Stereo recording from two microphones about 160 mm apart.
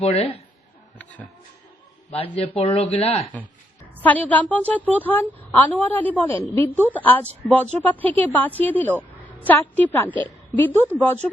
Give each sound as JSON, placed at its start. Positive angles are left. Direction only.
{"t": 0.0, "sound": "speech", "side_deg": 40}
{"t": 0.9, "sound": "a woman's voice", "side_deg": 10}
{"t": 2.0, "sound": "a man's voice", "side_deg": 35}
{"t": 4.0, "sound": "a woman's voice", "side_deg": 10}